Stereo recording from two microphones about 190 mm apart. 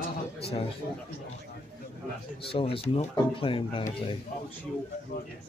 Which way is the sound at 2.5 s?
30° left (ahead or behind).